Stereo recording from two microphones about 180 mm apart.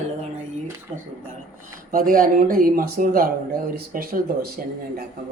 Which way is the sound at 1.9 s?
50° right (ahead or behind).